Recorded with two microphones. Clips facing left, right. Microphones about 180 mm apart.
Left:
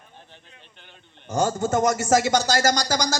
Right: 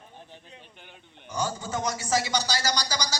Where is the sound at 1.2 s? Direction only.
45° left (ahead or behind).